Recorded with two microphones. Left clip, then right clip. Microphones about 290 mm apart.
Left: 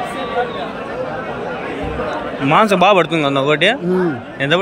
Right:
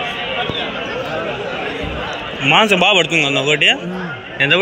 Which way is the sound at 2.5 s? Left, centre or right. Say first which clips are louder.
Even; centre.